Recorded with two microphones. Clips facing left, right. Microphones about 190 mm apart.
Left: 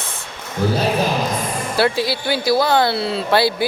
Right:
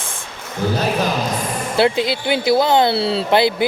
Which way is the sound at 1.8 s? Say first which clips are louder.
Right 2 dB; 20° right (ahead or behind).